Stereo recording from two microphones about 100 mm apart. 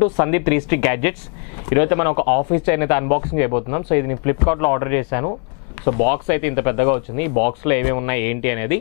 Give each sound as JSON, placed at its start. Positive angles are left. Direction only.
{"t": 0.0, "sound": "speech", "side_deg": 15}